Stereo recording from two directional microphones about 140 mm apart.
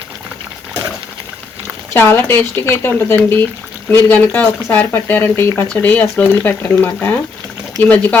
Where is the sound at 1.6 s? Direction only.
15° left (ahead or behind).